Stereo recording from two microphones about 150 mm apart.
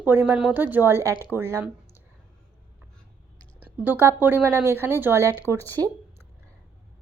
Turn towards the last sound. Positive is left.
turn(degrees=-15)  # may be behind; listen again after turning